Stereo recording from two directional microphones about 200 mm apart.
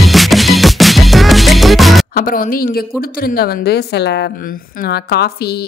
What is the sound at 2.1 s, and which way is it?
Speech, 45° left (ahead or behind).